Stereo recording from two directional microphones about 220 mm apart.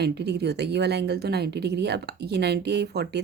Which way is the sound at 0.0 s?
50° right (ahead or behind).